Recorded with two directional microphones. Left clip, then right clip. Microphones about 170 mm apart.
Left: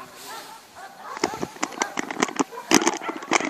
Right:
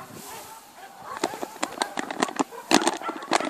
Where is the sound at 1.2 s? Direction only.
5° right (ahead or behind).